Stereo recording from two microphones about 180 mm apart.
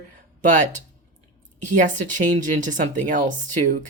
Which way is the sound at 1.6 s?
45° right (ahead or behind).